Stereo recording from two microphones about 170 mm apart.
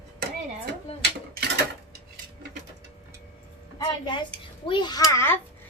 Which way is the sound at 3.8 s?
25° left (ahead or behind).